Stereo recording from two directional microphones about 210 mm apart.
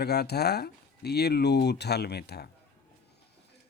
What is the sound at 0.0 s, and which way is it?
Speech, 50° left (ahead or behind).